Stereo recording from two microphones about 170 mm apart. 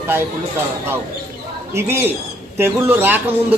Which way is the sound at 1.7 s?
15° right (ahead or behind).